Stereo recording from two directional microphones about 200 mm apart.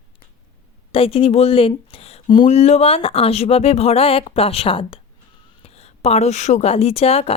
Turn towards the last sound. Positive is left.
turn(degrees=30)  # may be behind; listen again after turning